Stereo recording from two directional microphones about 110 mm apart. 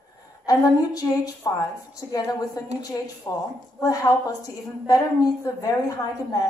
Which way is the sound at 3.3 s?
30° left (ahead or behind).